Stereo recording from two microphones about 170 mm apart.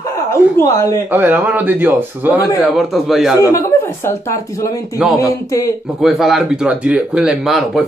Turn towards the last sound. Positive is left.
turn(degrees=0)  # may be behind; listen again after turning